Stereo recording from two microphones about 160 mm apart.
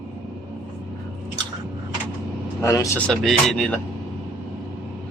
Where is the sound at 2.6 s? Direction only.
20° left (ahead or behind).